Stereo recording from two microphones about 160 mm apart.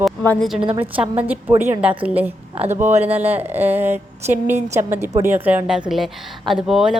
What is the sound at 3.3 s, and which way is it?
A woman's voice, 10° right (ahead or behind).